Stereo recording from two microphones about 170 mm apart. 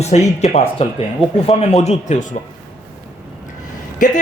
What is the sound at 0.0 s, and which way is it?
Speech, 40° left (ahead or behind).